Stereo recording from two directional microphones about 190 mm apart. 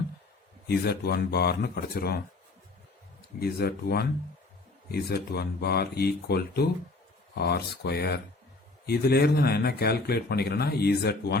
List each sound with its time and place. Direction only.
0.7 s speech: 55° left (ahead or behind)